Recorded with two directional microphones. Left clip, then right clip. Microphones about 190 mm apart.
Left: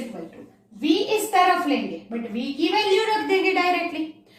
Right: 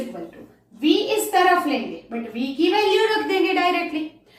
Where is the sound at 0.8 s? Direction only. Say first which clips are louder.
Right 2 dB; 15° left (ahead or behind).